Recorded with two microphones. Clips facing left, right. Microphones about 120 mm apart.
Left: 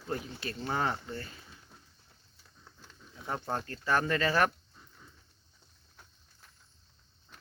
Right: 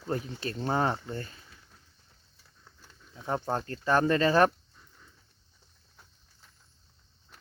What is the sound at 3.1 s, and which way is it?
Speech, 30° right (ahead or behind).